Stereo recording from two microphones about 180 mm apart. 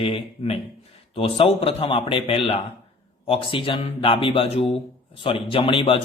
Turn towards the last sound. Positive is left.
turn(degrees=30)  # may be behind; listen again after turning